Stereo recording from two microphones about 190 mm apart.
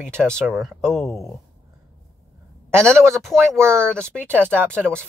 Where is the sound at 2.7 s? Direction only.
5° left (ahead or behind).